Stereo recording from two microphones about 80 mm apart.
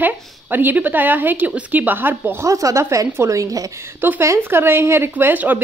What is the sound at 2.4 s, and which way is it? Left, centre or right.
A woman's voice, right.